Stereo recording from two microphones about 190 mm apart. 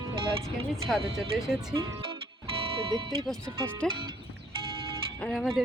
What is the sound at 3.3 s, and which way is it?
Speech, 5° left (ahead or behind).